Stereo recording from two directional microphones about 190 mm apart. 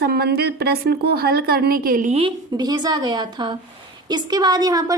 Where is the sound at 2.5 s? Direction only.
20° right (ahead or behind).